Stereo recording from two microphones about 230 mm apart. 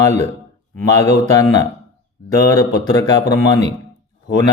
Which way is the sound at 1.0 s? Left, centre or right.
Centre.